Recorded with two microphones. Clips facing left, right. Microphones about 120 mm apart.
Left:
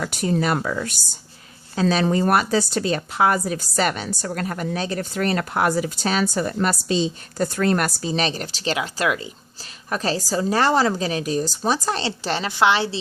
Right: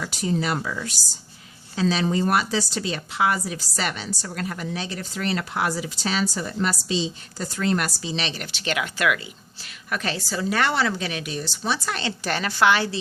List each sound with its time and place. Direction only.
0.0 s a woman's voice: 55° left (ahead or behind); by 13.0 s 25° left (ahead or behind)